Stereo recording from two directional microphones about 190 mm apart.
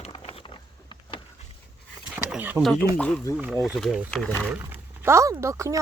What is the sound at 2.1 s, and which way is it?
Speech, 10° right (ahead or behind).